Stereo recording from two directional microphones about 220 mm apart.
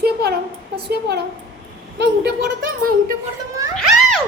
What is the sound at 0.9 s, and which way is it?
A woman's voice, 45° right (ahead or behind).